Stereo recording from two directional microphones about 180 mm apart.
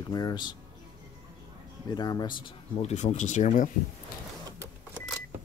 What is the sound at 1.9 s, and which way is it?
Speech, 20° left (ahead or behind).